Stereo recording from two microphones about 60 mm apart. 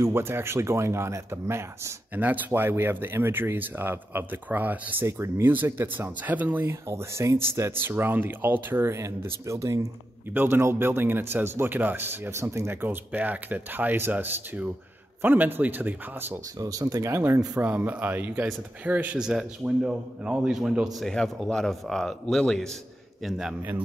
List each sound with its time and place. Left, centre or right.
0.1 s speech: right
2.1 s speech: right
6.6 s speech: right
7.7 s speech: right
9.5 s speech: right
10.3 s speech: right
12.3 s speech: right
12.8 s speech: right
16.5 s speech: right
17.6 s speech: right
19.1 s a man's voice: centre
21.0 s speech: centre
23.2 s a man's voice: centre